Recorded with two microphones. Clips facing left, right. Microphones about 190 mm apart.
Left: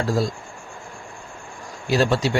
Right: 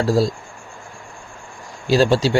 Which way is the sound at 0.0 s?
30° right (ahead or behind).